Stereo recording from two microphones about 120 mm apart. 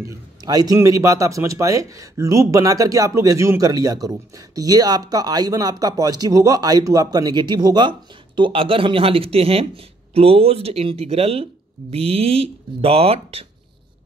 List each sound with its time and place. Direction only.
0.0 s a man's voice: 30° right (ahead or behind); by 13.5 s 55° right (ahead or behind)